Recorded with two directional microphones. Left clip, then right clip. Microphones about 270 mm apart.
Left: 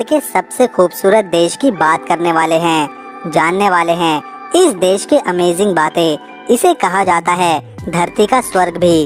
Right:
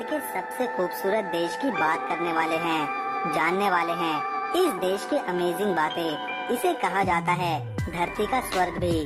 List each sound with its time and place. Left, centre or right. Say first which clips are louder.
0.0 s speech: left 15 dB; left